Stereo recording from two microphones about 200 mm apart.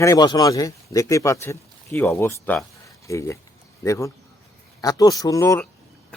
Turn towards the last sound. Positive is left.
turn(degrees=15)  # may be behind; listen again after turning